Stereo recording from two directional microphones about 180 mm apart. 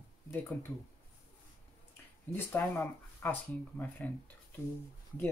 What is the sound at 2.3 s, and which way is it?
Speech, 10° left (ahead or behind).